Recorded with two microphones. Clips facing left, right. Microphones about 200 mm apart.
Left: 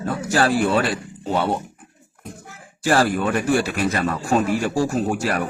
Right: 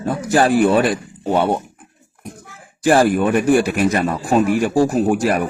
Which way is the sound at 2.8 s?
15° right (ahead or behind).